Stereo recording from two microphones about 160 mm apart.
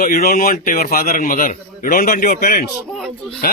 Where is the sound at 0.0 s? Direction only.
65° left (ahead or behind).